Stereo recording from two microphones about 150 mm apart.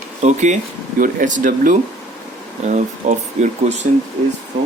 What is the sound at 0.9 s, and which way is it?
Speech, 60° right (ahead or behind).